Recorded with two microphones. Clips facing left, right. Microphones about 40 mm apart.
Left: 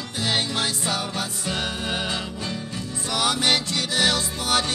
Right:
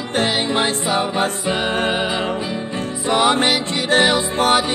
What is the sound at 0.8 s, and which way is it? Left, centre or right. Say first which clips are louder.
Music: right 8 dB; right.